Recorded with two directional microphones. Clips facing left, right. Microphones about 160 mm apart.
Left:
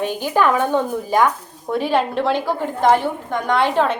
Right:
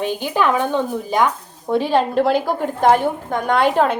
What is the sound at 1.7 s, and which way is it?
A woman's voice, 35° right (ahead or behind).